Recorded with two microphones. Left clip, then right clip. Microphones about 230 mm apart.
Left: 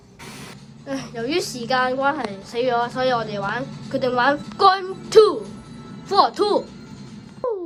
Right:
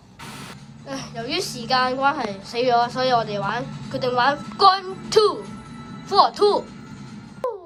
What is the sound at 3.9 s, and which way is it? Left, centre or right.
Music, centre.